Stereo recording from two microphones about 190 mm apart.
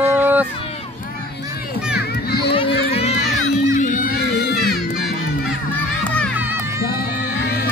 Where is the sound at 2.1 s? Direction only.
55° left (ahead or behind).